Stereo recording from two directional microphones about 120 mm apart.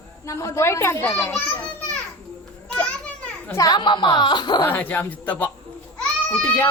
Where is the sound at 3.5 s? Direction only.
35° left (ahead or behind).